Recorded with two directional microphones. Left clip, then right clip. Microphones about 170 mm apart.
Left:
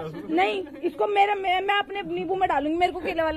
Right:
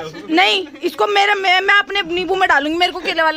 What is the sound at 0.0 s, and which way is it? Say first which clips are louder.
A man's voice: right 9 dB; 40° right (ahead or behind).